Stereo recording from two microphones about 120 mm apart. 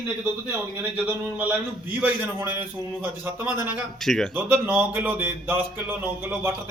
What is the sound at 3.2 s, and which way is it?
Speech, 20° right (ahead or behind).